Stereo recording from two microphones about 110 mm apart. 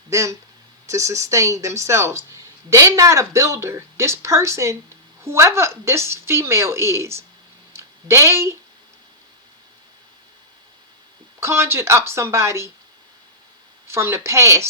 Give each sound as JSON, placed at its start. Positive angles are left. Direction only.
{"t": 0.1, "sound": "speech", "side_deg": -30}
{"t": 7.7, "sound": "a sound", "side_deg": -25}
{"t": 11.3, "sound": "speech", "side_deg": -20}
{"t": 13.8, "sound": "speech", "side_deg": -25}